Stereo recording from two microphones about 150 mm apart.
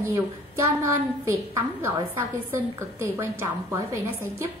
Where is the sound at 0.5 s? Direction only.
20° right (ahead or behind).